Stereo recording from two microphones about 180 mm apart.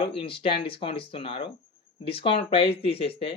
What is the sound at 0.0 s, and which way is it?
Speech, 30° left (ahead or behind).